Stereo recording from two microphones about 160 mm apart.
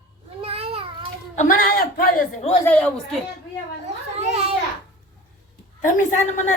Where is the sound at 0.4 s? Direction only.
35° right (ahead or behind).